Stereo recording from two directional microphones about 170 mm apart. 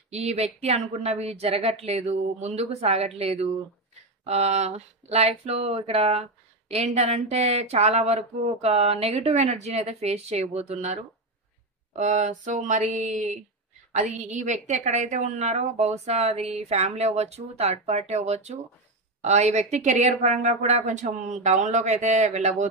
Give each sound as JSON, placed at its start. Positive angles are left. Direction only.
{"t": 0.1, "sound": "a woman's voice", "side_deg": -40}